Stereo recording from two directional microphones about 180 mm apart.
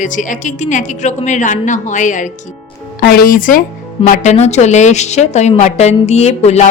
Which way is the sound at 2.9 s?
55° left (ahead or behind).